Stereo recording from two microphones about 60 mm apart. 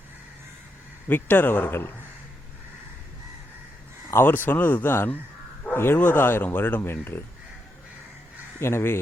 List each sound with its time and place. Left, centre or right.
1.0 s speech: left
4.1 s speech: left
8.5 s speech: left